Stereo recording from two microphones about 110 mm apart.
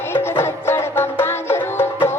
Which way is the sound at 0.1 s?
20° left (ahead or behind).